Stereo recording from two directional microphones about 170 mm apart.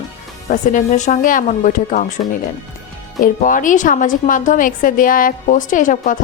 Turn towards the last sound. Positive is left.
turn(degrees=50)  # may be behind; listen again after turning